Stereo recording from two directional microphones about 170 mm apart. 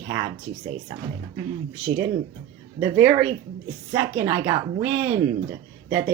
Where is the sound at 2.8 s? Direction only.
10° right (ahead or behind).